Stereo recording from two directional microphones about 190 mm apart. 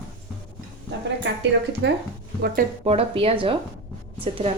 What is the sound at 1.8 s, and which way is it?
Speech, 70° right (ahead or behind).